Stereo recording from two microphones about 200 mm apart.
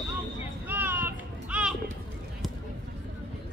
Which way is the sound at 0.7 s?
10° right (ahead or behind).